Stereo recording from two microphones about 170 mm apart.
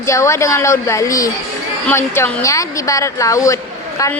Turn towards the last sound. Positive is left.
turn(degrees=20)  # may be behind; listen again after turning